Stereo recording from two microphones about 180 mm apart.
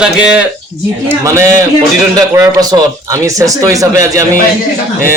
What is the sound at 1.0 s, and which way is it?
A man's voice, 15° right (ahead or behind).